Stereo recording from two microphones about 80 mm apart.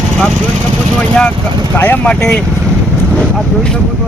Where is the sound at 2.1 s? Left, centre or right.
Centre.